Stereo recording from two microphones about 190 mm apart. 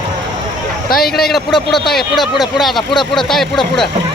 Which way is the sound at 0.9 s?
50° left (ahead or behind).